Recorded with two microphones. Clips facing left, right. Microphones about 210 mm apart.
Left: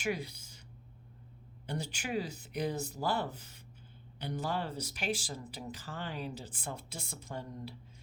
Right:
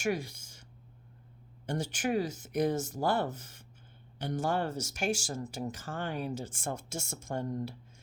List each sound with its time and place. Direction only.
0.0 s speech: 45° right (ahead or behind)
1.6 s speech: 45° right (ahead or behind)